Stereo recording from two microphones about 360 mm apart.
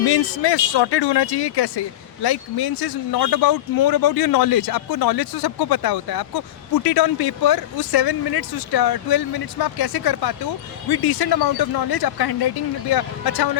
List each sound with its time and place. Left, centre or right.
0.1 s speech: left